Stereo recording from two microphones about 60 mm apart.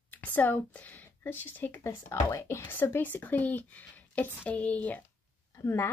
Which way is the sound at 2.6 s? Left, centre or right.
Left.